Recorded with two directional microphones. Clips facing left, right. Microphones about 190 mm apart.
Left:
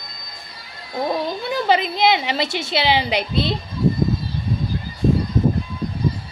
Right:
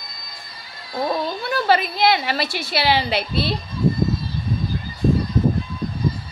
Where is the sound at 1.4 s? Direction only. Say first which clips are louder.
Even; 20° left (ahead or behind).